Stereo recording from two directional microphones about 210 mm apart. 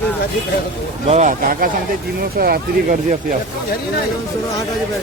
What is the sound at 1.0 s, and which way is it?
Speech, 35° right (ahead or behind).